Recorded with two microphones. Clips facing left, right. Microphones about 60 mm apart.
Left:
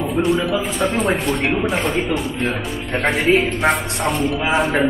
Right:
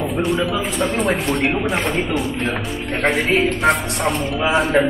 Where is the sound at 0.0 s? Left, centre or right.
Centre.